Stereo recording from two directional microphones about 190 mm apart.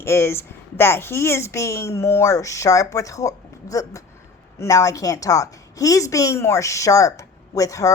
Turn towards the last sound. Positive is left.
turn(degrees=15)  # may be behind; listen again after turning